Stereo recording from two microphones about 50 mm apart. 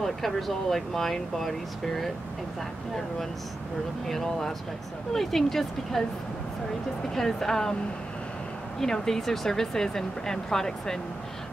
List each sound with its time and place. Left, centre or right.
0.0 s speech: centre
4.1 s speech: centre
7.2 s speech: centre
8.8 s speech: centre